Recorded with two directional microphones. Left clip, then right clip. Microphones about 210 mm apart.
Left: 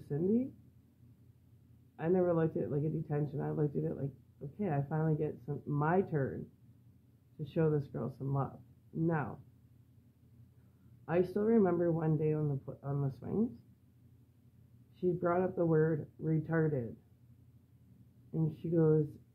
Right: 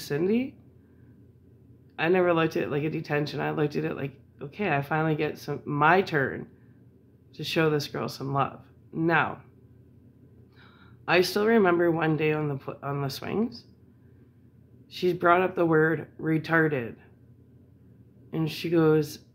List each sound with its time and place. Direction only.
0.1 s speech: 20° right (ahead or behind)
2.0 s speech: 20° right (ahead or behind)
7.5 s speech: 15° right (ahead or behind)
11.1 s speech: 15° right (ahead or behind)
15.1 s speech: 20° right (ahead or behind)
18.3 s speech: 15° right (ahead or behind)